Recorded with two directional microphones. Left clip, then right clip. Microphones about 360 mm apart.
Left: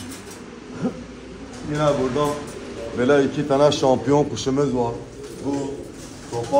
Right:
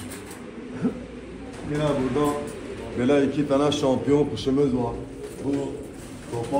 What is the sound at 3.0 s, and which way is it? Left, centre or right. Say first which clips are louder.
A man's voice: left 3 dB; left.